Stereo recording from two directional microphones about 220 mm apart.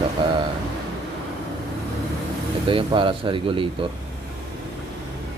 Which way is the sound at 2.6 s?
25° right (ahead or behind).